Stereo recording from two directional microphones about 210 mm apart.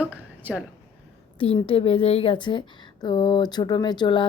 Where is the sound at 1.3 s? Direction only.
25° left (ahead or behind).